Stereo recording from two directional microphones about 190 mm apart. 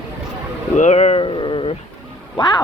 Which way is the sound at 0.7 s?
40° left (ahead or behind).